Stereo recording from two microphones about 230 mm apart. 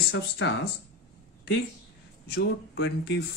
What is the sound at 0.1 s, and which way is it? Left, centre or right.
Speech, left.